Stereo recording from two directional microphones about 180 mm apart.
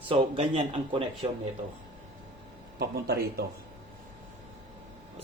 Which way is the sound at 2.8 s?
60° right (ahead or behind).